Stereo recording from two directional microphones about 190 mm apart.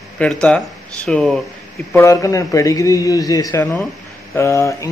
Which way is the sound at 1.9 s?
15° left (ahead or behind).